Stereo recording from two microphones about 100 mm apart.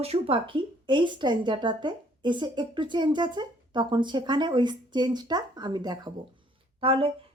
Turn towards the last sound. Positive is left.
turn(degrees=-70)  # may be behind; listen again after turning